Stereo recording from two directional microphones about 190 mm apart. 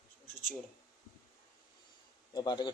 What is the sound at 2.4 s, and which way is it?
Speech, 20° left (ahead or behind).